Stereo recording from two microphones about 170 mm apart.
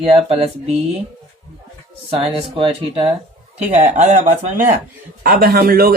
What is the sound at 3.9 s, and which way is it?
Speech, 45° right (ahead or behind).